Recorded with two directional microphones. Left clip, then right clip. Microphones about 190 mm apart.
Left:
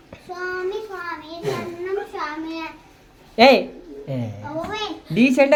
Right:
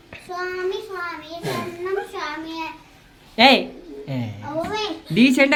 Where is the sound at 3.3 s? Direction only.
5° left (ahead or behind).